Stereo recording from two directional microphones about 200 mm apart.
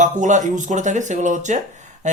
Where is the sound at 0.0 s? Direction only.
40° right (ahead or behind).